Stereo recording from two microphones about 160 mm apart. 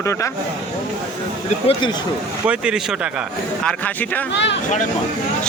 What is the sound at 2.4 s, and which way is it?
Speech, 5° right (ahead or behind).